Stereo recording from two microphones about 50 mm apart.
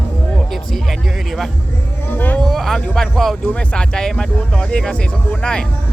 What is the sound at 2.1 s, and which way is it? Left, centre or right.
Speech, left.